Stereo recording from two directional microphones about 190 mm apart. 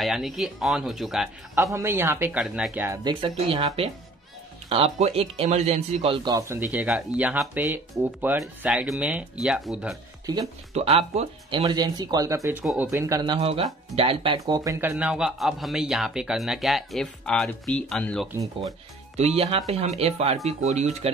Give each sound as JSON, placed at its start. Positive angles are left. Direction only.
{"t": 0.0, "sound": "speech", "side_deg": 0}
{"t": 1.6, "sound": "speech", "side_deg": -15}
{"t": 3.0, "sound": "speech", "side_deg": -20}
{"t": 10.2, "sound": "speech", "side_deg": -20}
{"t": 10.7, "sound": "speech", "side_deg": -35}
{"t": 12.6, "sound": "speech", "side_deg": -5}
{"t": 12.9, "sound": "speech", "side_deg": -15}
{"t": 19.1, "sound": "speech", "side_deg": -35}